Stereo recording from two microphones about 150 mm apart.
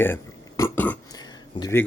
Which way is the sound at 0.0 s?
15° left (ahead or behind).